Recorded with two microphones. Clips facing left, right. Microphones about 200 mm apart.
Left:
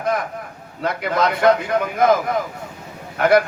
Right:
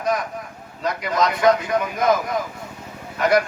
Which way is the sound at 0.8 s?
55° left (ahead or behind).